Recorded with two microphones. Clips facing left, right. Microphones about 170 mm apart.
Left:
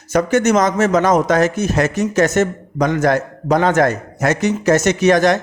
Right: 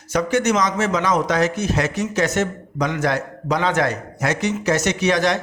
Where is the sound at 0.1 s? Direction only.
45° left (ahead or behind).